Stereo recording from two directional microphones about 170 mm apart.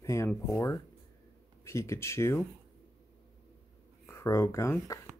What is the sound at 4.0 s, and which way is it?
Speech, 15° left (ahead or behind).